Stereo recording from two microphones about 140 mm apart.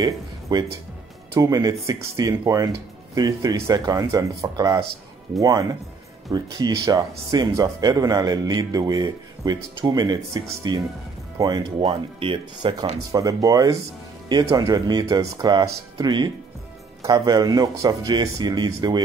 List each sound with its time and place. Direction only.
0.0 s speech: 30° right (ahead or behind)
11.8 s speech: 40° right (ahead or behind)
13.1 s speech: 25° right (ahead or behind)